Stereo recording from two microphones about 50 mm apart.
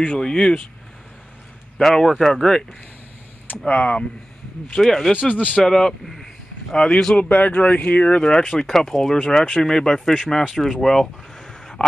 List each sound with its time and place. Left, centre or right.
0.0 s speech: centre
1.8 s speech: centre
3.6 s speech: left
4.7 s speech: centre
5.3 s speech: left
5.6 s speech: centre
7.2 s speech: left; by 11.8 s centre